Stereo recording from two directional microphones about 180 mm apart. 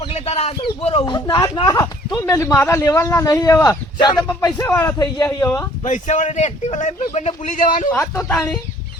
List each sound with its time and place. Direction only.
0.0 s a man's voice: 35° left (ahead or behind); by 4.7 s 20° left (ahead or behind)
4.7 s a man's voice: 10° left (ahead or behind)
4.9 s a man's voice: 20° left (ahead or behind)
5.8 s a man's voice: 45° left (ahead or behind)
8.1 s speech: 5° left (ahead or behind)